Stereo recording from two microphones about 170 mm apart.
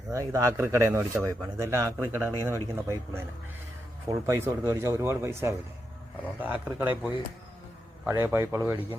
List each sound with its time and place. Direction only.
0.1 s a man's voice: 20° right (ahead or behind)